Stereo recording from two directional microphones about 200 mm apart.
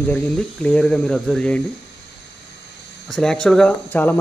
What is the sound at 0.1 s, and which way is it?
Speech, 5° left (ahead or behind).